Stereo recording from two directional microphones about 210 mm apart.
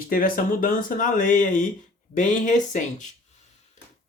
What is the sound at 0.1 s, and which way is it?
Speech, 40° left (ahead or behind).